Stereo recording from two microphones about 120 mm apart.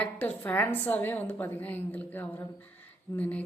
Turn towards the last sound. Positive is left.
turn(degrees=10)  # may be behind; listen again after turning